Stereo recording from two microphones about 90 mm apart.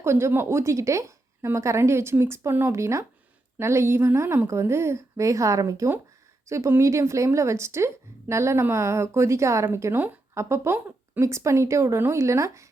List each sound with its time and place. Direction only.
0.0 s a woman's voice: 30° right (ahead or behind)